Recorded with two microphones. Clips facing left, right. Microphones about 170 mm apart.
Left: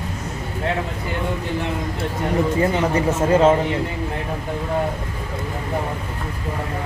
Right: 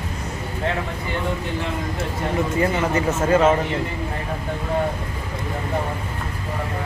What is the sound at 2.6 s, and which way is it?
Speech, 30° left (ahead or behind).